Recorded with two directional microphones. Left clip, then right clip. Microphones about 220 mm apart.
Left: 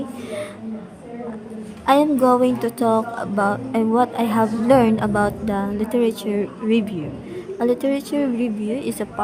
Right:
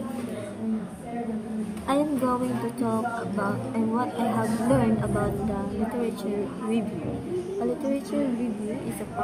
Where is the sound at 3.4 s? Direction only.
55° left (ahead or behind).